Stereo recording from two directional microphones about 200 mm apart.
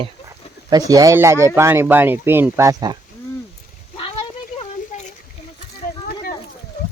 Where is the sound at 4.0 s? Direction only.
30° left (ahead or behind).